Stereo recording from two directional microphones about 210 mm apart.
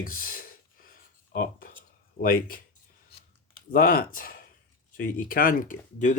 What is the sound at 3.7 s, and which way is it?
Speech, 40° left (ahead or behind).